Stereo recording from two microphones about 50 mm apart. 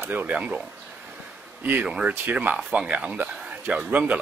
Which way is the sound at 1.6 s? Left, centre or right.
Right.